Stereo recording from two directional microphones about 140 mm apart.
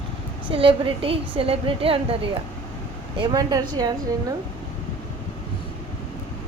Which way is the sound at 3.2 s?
30° right (ahead or behind).